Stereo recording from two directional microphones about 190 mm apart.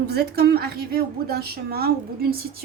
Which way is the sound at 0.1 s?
55° right (ahead or behind).